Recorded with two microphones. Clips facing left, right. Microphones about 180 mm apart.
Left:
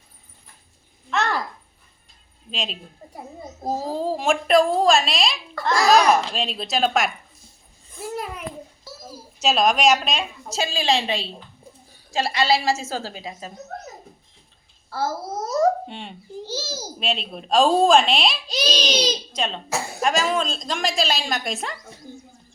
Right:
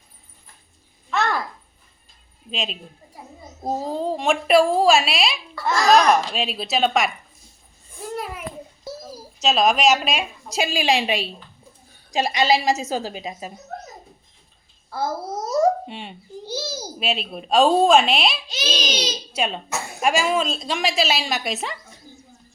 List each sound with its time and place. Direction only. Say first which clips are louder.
2.5 s a woman's voice: right 2 dB; centre (ahead or behind)
5.7 s a woman's voice: even; 10° left (ahead or behind)
8.1 s a sound: right 1 dB; centre (ahead or behind)
9.4 s a woman's voice: right 1 dB; centre (ahead or behind); by 13.5 s 15° right (ahead or behind)
14.8 s a child's voice: even; 15° right (ahead or behind)
18.4 s a child's voice: left 4 dB; 35° left (ahead or behind)
18.7 s a woman's voice: left 2 dB; 5° right (ahead or behind)
22.1 s a sound: left 7 dB; 55° left (ahead or behind)